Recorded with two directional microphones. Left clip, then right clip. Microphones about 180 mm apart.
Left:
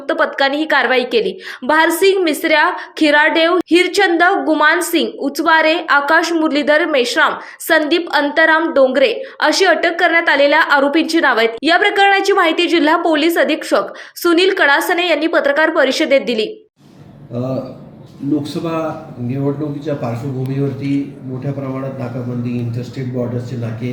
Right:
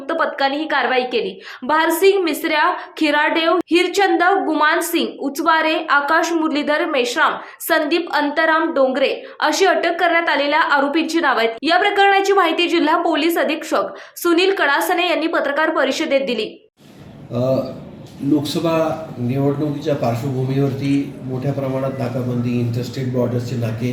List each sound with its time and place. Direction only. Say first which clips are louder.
0.1 s a woman's voice: left 4 dB; 20° left (ahead or behind)
17.3 s a man's voice: right 3 dB; centre (ahead or behind)